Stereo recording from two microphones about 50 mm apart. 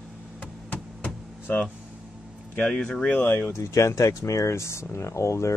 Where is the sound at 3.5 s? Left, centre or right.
Left.